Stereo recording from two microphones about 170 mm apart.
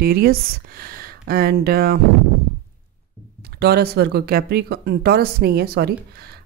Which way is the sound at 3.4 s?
70° right (ahead or behind).